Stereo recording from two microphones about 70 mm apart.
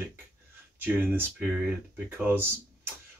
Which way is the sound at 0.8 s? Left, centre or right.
Right.